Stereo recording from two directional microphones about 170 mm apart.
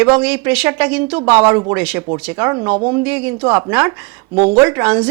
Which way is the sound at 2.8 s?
25° right (ahead or behind).